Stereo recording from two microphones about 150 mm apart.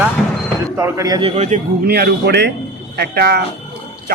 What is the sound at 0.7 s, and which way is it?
Speech, 20° right (ahead or behind).